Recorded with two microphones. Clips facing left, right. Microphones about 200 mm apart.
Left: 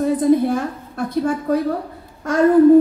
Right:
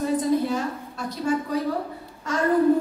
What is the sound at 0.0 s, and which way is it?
A woman's voice, 55° left (ahead or behind).